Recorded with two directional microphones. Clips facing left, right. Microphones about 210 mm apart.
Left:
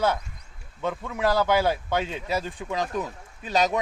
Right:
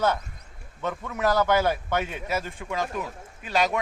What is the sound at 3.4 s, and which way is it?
Speech, 40° left (ahead or behind).